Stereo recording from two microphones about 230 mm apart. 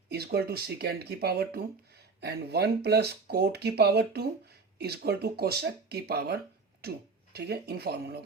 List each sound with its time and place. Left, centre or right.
0.1 s speech: right